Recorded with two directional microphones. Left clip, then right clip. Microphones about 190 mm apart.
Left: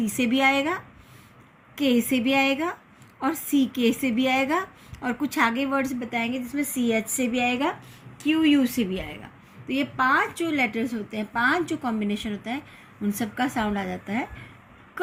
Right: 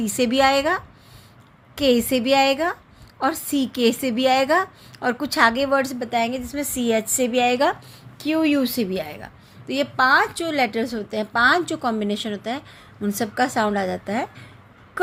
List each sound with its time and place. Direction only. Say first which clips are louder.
0.0 s a woman's voice: right 4 dB; 50° right (ahead or behind)
8.2 s a woman's voice: right 1 dB; 35° right (ahead or behind)